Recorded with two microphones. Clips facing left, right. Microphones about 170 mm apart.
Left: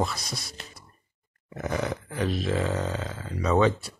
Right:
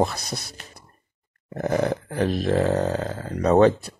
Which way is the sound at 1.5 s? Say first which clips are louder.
Right 7 dB; 40° right (ahead or behind).